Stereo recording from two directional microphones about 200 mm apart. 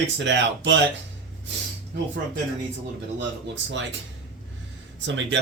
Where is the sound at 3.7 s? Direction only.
65° right (ahead or behind).